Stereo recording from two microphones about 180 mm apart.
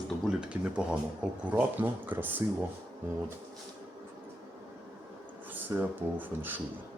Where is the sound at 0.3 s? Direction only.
5° right (ahead or behind).